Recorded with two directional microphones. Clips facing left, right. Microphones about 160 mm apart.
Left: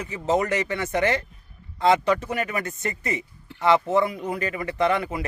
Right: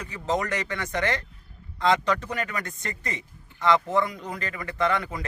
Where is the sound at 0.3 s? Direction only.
20° left (ahead or behind).